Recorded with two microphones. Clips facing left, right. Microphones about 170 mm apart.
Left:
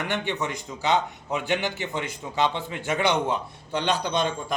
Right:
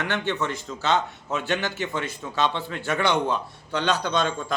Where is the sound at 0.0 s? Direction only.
15° left (ahead or behind).